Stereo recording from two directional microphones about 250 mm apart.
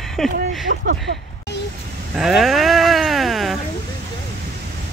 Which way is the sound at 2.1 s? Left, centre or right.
Centre.